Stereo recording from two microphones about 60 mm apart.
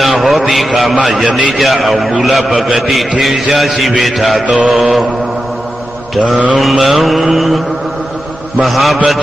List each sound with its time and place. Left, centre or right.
0.0 s a man's voice: centre
6.1 s a man's voice: centre
8.6 s a man's voice: centre